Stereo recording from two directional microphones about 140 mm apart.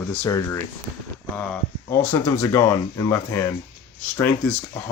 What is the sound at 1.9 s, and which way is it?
Speech, 20° left (ahead or behind).